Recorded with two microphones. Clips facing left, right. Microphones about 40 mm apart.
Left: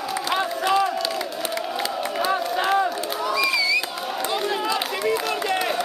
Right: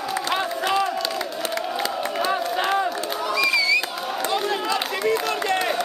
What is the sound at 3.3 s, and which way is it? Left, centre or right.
Crowd, centre.